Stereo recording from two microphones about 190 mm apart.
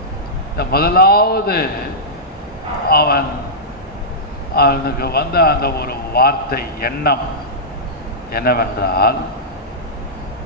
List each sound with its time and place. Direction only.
0.5 s a man's voice: 55° left (ahead or behind)
2.9 s a man's voice: 55° left (ahead or behind)
4.5 s a man's voice: 55° left (ahead or behind)
8.3 s a man's voice: 55° left (ahead or behind)